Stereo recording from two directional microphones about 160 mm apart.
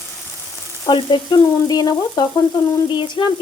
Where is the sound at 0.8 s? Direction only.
30° left (ahead or behind).